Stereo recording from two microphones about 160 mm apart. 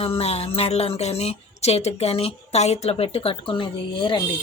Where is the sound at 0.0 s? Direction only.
40° left (ahead or behind).